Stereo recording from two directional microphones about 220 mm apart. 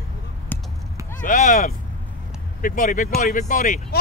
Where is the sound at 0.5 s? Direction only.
10° left (ahead or behind).